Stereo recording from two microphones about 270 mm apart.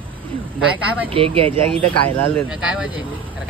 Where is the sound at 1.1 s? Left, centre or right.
Right.